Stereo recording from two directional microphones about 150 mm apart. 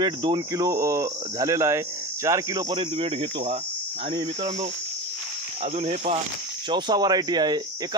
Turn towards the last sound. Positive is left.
turn(degrees=-30)  # may be behind; listen again after turning